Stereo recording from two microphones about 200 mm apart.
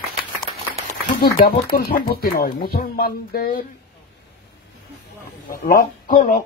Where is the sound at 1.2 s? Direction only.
50° left (ahead or behind).